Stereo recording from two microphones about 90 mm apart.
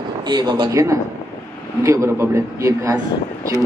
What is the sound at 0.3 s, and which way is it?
Speech, 55° right (ahead or behind).